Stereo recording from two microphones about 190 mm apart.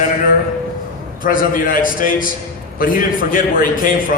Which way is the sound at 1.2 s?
45° left (ahead or behind).